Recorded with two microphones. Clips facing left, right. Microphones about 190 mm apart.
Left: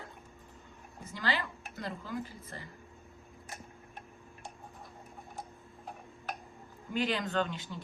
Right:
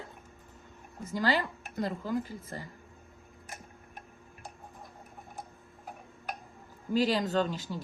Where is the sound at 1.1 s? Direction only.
40° right (ahead or behind).